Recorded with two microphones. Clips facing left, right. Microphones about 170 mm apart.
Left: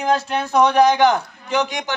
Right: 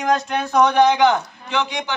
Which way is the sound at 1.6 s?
45° left (ahead or behind).